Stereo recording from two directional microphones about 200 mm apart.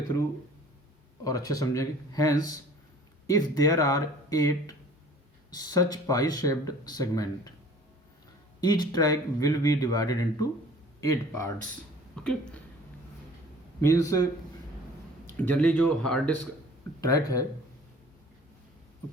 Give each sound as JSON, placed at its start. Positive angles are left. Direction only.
{"t": 1.2, "sound": "speech", "side_deg": 15}
{"t": 8.6, "sound": "speech", "side_deg": 20}
{"t": 12.1, "sound": "speech", "side_deg": 5}
{"t": 13.8, "sound": "speech", "side_deg": 15}
{"t": 15.4, "sound": "speech", "side_deg": 5}
{"t": 17.0, "sound": "speech", "side_deg": 15}